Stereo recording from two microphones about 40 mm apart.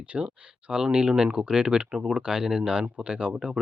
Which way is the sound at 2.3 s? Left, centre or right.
Centre.